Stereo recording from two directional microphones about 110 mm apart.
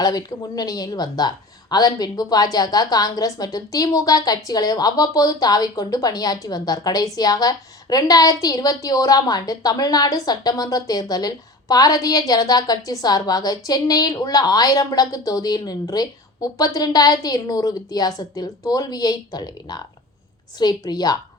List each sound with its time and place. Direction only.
0.0 s a woman's voice: 35° left (ahead or behind)